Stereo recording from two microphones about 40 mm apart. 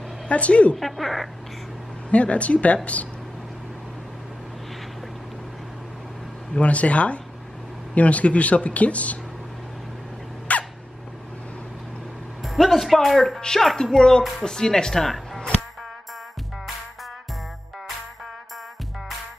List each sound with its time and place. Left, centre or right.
0.3 s speech: left
0.7 s speech: centre
2.0 s speech: left
6.5 s speech: left
10.5 s a sound: left
12.4 s speech: centre